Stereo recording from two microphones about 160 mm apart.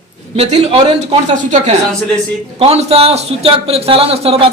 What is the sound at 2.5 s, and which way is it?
A man's voice, 40° right (ahead or behind).